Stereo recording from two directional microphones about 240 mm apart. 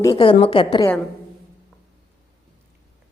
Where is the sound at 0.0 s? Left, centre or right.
Centre.